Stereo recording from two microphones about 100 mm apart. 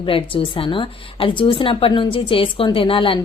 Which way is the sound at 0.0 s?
60° left (ahead or behind).